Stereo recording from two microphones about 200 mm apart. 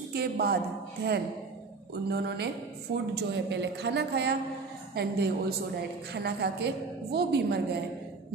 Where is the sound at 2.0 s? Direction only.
55° right (ahead or behind).